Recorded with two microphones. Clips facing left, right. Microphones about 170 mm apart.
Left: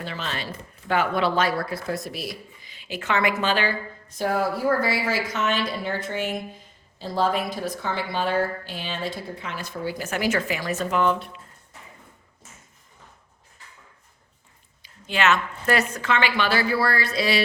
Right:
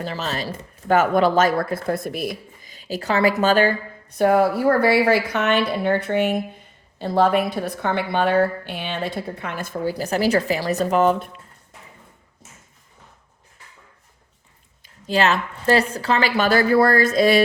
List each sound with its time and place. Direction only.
0.0 s speech: 40° right (ahead or behind)
4.2 s a woman's voice: 60° right (ahead or behind); by 11.3 s 45° right (ahead or behind)
14.8 s speech: 40° right (ahead or behind)